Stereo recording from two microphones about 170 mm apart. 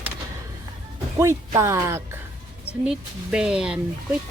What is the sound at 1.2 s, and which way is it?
Speech, 15° right (ahead or behind).